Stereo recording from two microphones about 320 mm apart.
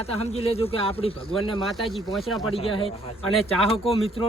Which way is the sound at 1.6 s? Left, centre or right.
Centre.